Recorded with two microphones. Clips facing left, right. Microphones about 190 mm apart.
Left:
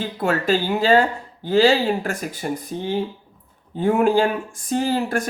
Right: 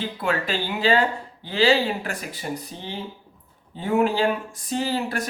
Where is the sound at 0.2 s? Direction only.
45° left (ahead or behind).